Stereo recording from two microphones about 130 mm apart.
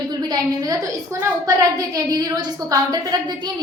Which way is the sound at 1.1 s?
25° right (ahead or behind).